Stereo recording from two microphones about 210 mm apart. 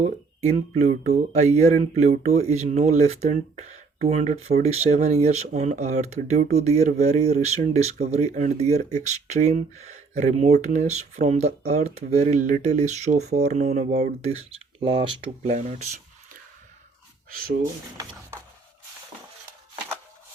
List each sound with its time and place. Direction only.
0.0 s speech: 30° right (ahead or behind)
15.5 s speech: 35° right (ahead or behind)
17.6 s speech: 15° right (ahead or behind)